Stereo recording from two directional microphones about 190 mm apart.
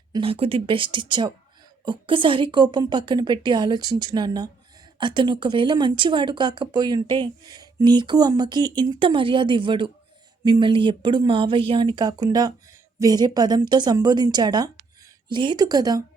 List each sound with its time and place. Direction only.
0.1 s speech: 30° right (ahead or behind)